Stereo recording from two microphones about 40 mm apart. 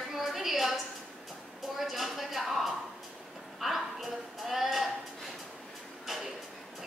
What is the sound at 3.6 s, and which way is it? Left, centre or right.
Sheep, centre.